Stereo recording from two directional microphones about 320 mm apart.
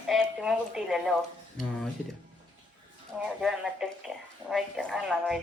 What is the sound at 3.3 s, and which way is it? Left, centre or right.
A woman's voice, centre.